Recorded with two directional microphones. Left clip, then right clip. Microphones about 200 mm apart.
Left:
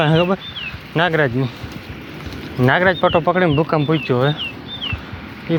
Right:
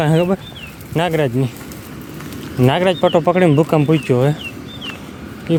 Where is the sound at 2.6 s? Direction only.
20° right (ahead or behind).